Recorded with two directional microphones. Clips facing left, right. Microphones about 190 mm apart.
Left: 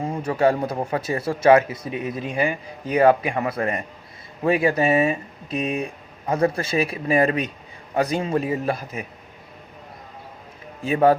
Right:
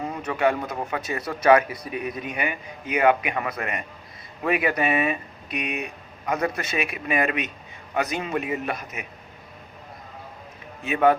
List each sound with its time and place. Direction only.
0.0 s a man's voice: 30° left (ahead or behind)
10.8 s a man's voice: 30° left (ahead or behind)